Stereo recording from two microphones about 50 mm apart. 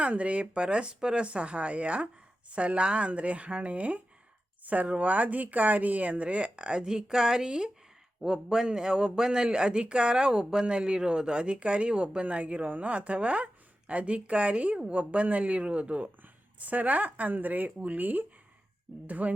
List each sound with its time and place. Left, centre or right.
0.0 s a man's voice: right